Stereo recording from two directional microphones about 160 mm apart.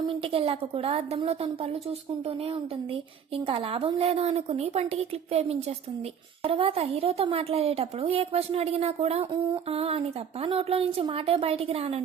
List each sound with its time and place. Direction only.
0.0 s a woman's voice: 35° right (ahead or behind)